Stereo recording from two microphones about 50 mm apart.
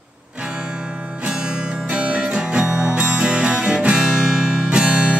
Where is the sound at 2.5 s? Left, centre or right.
Centre.